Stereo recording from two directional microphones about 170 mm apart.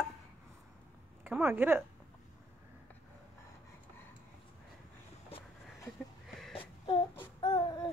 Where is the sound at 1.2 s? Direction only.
10° right (ahead or behind).